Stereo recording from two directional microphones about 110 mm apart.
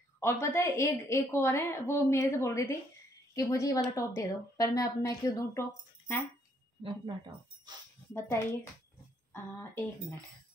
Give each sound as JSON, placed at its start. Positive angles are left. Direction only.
{"t": 0.2, "sound": "a woman's voice", "side_deg": 20}
{"t": 6.8, "sound": "speech", "side_deg": -50}
{"t": 8.1, "sound": "a woman's voice", "side_deg": 25}